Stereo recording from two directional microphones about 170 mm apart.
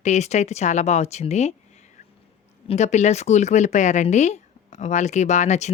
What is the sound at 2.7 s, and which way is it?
A woman's voice, 40° left (ahead or behind).